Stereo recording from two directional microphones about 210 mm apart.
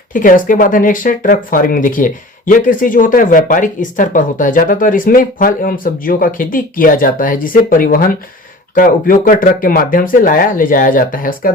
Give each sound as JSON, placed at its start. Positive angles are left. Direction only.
{"t": 0.1, "sound": "speech", "side_deg": 40}